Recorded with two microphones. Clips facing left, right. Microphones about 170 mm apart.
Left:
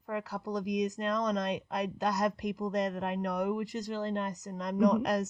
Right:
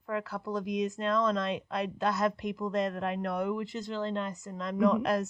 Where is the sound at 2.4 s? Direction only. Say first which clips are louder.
Right 1 dB; 45° left (ahead or behind).